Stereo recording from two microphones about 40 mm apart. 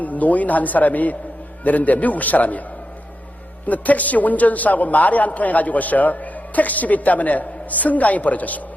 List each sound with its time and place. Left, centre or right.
0.0 s a man's voice: left
3.7 s a man's voice: left